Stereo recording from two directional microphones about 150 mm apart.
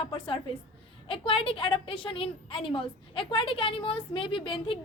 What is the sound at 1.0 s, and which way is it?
A woman's voice, 35° left (ahead or behind).